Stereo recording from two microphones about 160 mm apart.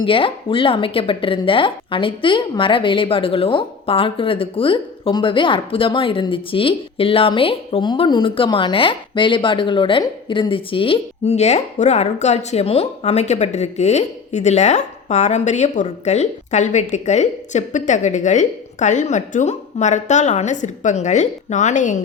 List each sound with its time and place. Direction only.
0.0 s speech: 35° left (ahead or behind); by 22.0 s 50° left (ahead or behind)